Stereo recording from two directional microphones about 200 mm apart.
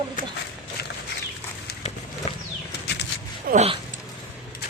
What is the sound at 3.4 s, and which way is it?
Speech, 30° right (ahead or behind).